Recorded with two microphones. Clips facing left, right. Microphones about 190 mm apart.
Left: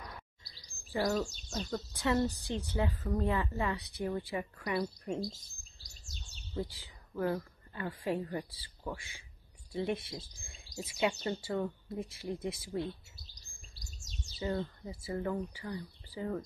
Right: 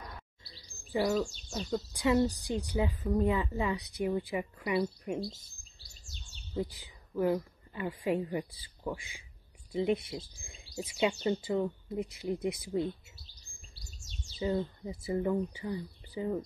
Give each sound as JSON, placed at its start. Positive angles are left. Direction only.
{"t": 0.9, "sound": "speech", "side_deg": -15}
{"t": 6.5, "sound": "speech", "side_deg": -15}
{"t": 14.4, "sound": "speech", "side_deg": -20}